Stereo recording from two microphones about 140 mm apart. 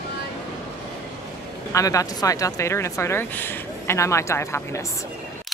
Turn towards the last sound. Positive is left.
turn(degrees=20)  # may be behind; listen again after turning